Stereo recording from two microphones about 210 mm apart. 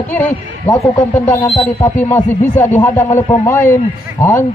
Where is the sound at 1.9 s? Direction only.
10° left (ahead or behind).